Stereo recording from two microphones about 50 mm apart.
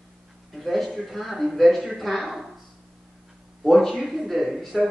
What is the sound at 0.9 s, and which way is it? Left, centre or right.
Speech, centre.